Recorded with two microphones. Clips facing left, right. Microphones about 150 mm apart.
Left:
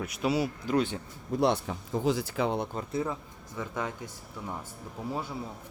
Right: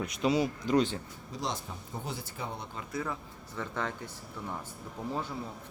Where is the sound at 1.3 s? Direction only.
60° left (ahead or behind); by 2.6 s 85° left.